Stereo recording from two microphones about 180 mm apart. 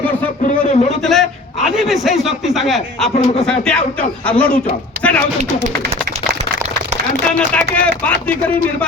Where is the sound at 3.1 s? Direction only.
35° left (ahead or behind).